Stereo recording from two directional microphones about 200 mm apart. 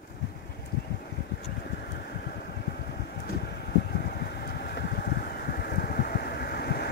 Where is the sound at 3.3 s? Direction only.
50° left (ahead or behind).